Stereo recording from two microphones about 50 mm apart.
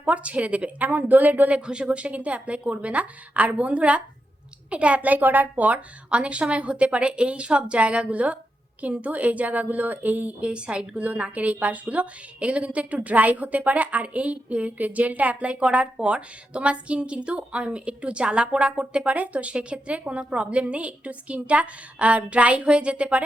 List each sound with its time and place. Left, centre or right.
0.0 s a woman's voice: right
1.5 s a woman's voice: right
10.4 s a woman's voice: right